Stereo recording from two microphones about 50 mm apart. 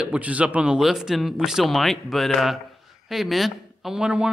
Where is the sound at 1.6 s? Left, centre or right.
Centre.